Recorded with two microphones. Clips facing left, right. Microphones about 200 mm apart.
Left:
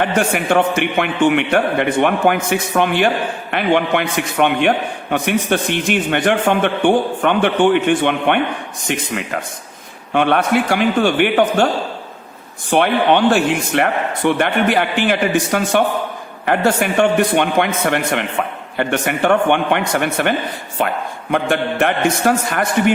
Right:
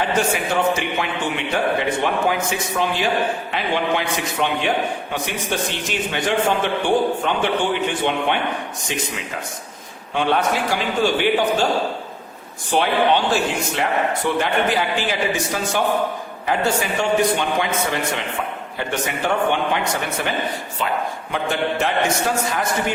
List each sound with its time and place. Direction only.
0.0 s a man's voice: 60° left (ahead or behind)
12.7 s a man's voice: 60° left (ahead or behind)